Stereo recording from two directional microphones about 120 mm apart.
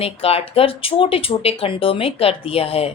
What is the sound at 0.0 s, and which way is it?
A woman's voice, 55° left (ahead or behind).